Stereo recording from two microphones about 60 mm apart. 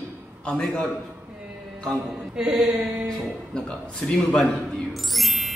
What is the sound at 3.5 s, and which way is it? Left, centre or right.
A man's voice, centre.